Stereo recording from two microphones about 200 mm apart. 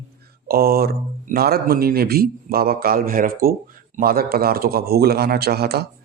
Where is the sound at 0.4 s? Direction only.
50° right (ahead or behind).